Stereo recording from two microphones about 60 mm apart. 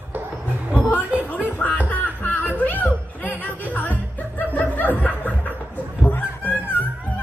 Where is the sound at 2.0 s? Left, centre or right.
Left.